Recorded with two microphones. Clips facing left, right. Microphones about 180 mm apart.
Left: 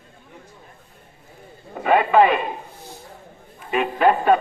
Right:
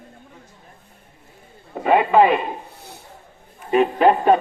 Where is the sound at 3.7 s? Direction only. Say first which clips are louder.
Right 5 dB; 35° right (ahead or behind).